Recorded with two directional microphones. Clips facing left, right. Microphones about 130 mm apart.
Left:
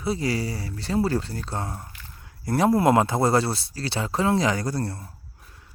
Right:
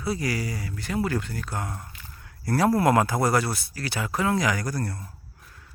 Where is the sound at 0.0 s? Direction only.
25° left (ahead or behind).